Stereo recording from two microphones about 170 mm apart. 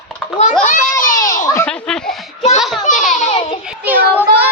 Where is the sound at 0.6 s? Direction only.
55° left (ahead or behind).